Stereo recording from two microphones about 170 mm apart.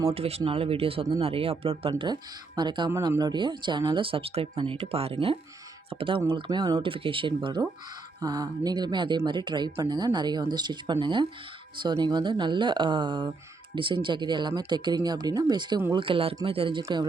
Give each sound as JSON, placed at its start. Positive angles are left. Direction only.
{"t": 0.1, "sound": "speech", "side_deg": -35}